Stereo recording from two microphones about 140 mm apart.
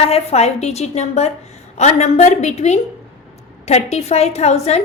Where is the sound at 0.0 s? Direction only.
50° left (ahead or behind).